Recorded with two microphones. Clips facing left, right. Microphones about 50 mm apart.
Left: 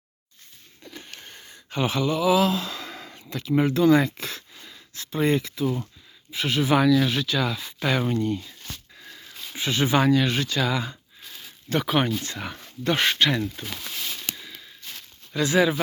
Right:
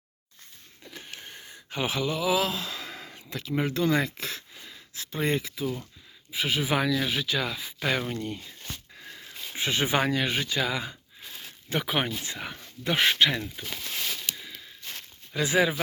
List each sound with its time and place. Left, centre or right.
0.9 s a sound: centre
3.5 s speech: centre
5.6 s speech: left
6.3 s speech: centre
8.2 s speech: centre
8.6 s a sound: right
9.6 s speech: right; by 13.4 s centre
14.1 s a sound: centre
15.3 s speech: centre